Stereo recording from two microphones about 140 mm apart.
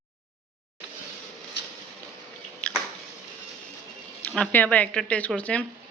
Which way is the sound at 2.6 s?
10° left (ahead or behind).